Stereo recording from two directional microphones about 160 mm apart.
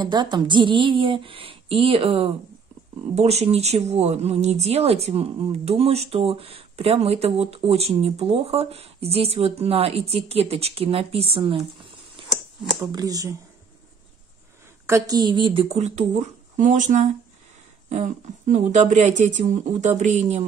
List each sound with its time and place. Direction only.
0.0 s speech: 30° right (ahead or behind)
14.9 s speech: 20° right (ahead or behind); by 20.4 s 45° right (ahead or behind)